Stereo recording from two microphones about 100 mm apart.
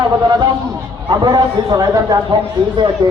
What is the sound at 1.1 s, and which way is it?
A man's voice, 45° right (ahead or behind).